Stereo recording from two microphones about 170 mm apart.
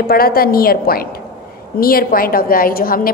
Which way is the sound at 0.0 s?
60° left (ahead or behind).